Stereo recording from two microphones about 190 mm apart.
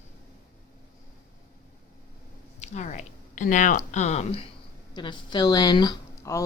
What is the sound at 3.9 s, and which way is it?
Speech, 35° left (ahead or behind).